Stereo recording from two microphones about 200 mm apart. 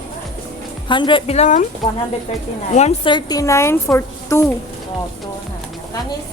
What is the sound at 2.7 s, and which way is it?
A woman's voice, 35° left (ahead or behind).